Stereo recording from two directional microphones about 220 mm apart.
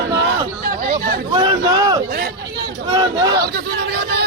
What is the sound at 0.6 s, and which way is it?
Chatter, 45° right (ahead or behind).